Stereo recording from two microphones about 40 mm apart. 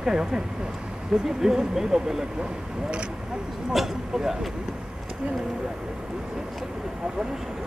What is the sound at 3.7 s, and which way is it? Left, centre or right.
Speech, centre.